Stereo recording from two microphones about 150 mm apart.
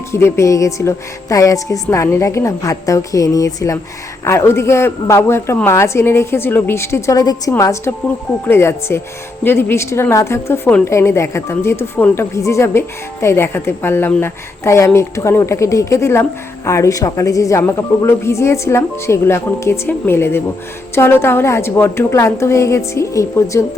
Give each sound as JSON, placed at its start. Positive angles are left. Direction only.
{"t": 0.1, "sound": "a woman's voice", "side_deg": 20}